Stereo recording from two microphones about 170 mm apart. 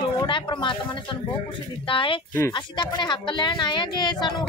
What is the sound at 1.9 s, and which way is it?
Speech, 30° left (ahead or behind).